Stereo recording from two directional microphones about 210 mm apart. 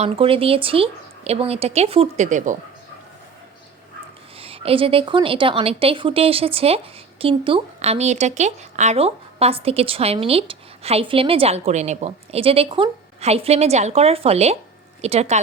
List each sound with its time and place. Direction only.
0.0 s speech: 25° right (ahead or behind)
4.4 s speech: 25° right (ahead or behind)